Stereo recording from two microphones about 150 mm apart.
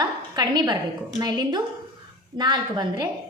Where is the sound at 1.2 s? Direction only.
30° right (ahead or behind).